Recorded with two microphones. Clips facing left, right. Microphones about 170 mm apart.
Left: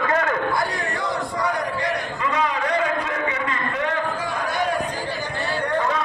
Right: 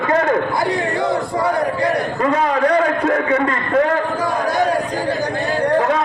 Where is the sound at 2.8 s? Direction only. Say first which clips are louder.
Right 7 dB; 50° right (ahead or behind).